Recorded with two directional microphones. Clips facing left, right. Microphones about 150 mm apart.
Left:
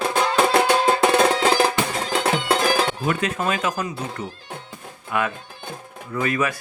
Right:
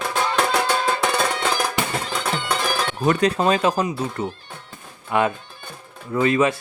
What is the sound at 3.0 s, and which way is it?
Speech, 35° right (ahead or behind).